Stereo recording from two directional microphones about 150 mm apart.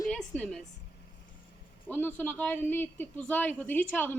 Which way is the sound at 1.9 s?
10° left (ahead or behind).